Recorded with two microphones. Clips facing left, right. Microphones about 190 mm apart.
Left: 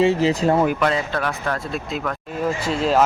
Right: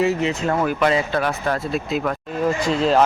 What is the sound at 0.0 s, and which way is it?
Speech, 30° left (ahead or behind).